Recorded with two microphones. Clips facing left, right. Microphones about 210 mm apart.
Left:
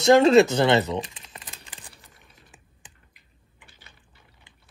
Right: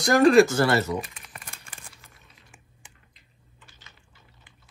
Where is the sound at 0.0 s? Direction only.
25° left (ahead or behind).